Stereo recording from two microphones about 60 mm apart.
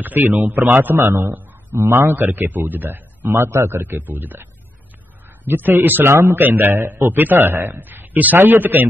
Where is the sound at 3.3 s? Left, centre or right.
Right.